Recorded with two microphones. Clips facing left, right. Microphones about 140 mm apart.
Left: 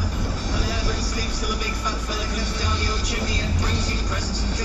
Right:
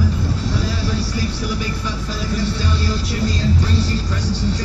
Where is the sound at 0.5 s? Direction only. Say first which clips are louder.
Right 4 dB; 15° left (ahead or behind).